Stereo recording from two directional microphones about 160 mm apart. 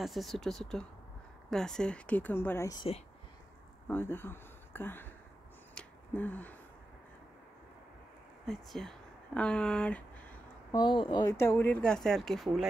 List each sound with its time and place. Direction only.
0.0 s speech: centre (ahead or behind)
3.8 s speech: 15° left (ahead or behind)
5.8 s a sound: 10° left (ahead or behind)
8.5 s speech: centre (ahead or behind)
10.7 s speech: 30° left (ahead or behind)
11.3 s speech: 15° left (ahead or behind)